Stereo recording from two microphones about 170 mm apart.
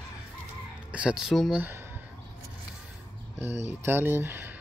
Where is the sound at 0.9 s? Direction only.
5° right (ahead or behind).